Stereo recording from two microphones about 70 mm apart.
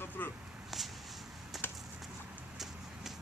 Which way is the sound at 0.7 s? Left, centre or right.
Centre.